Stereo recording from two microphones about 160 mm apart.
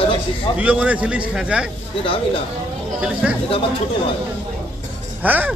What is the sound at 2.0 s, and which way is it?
Speech, 35° left (ahead or behind).